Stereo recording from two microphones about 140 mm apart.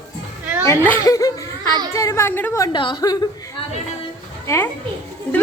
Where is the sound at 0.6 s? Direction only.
20° left (ahead or behind).